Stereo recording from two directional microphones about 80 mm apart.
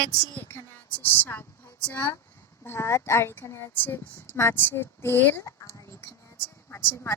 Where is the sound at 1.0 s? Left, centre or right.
Left.